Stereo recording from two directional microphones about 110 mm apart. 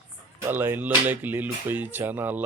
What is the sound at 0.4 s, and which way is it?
Speech, 20° right (ahead or behind).